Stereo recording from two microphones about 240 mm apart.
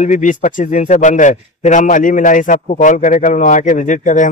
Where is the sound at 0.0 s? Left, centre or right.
Left.